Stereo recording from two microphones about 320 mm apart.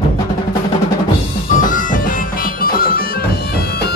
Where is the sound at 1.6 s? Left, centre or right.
Left.